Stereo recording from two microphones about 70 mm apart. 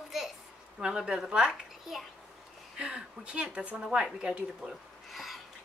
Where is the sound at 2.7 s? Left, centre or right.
Centre.